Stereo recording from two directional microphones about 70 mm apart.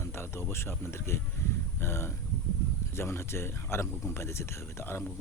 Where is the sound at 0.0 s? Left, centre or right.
Left.